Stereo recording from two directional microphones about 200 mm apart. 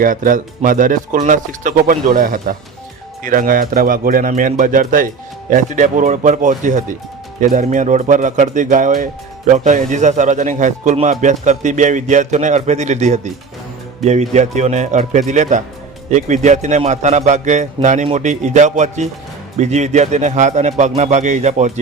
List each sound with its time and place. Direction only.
0.0 s speech: 45° right (ahead or behind)